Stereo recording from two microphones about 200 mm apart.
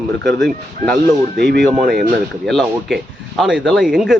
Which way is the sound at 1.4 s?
55° right (ahead or behind).